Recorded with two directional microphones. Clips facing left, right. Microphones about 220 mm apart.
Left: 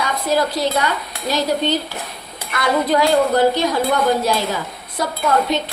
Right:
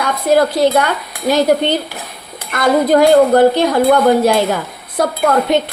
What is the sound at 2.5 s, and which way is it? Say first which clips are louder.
Speech: right 6 dB; 50° right (ahead or behind).